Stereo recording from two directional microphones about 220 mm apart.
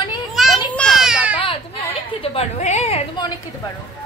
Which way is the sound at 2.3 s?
30° left (ahead or behind).